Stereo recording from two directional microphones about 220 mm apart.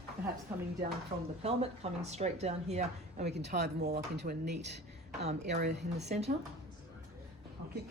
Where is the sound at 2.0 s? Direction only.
30° right (ahead or behind).